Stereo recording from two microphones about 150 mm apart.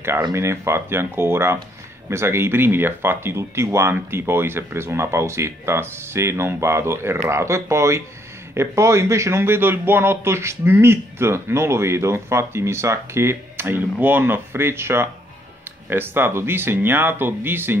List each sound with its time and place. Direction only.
0.3 s a man's voice: 20° right (ahead or behind)